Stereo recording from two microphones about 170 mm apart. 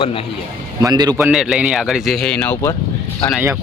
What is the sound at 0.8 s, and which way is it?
Speech, 25° right (ahead or behind).